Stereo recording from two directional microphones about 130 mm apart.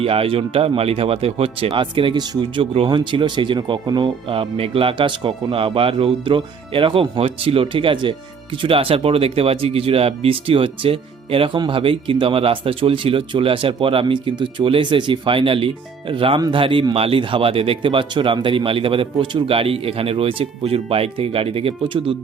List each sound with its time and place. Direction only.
0.0 s speech: 45° right (ahead or behind)